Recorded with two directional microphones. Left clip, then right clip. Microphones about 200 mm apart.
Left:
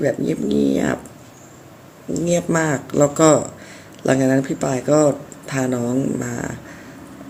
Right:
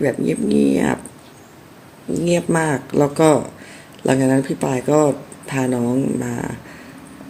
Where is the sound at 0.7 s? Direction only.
15° right (ahead or behind).